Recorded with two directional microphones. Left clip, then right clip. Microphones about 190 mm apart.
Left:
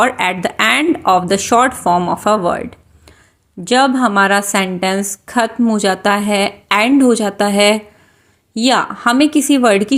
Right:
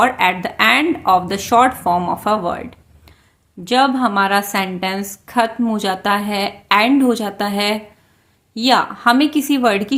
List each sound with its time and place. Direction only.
0.0 s a woman's voice: 30° left (ahead or behind)